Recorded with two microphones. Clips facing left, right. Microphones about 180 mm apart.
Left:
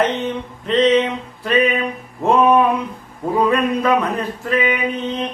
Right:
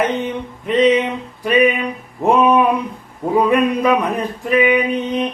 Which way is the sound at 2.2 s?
15° right (ahead or behind).